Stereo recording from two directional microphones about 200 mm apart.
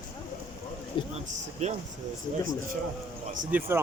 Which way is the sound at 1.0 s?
25° left (ahead or behind).